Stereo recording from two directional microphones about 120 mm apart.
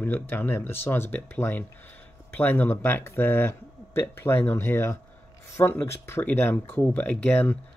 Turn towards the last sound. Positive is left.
turn(degrees=15)  # may be behind; listen again after turning